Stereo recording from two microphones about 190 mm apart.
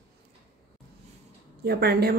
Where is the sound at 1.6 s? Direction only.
55° right (ahead or behind).